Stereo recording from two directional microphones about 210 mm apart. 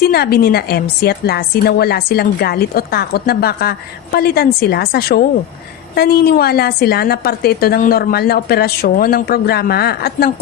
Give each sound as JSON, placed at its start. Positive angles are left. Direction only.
{"t": 0.0, "sound": "a woman's voice", "side_deg": 50}